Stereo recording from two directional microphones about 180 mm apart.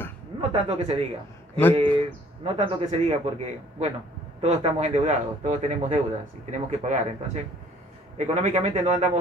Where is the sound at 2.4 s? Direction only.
35° right (ahead or behind).